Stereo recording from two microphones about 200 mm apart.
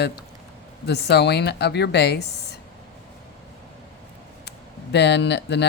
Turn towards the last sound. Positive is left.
turn(degrees=55)  # may be behind; listen again after turning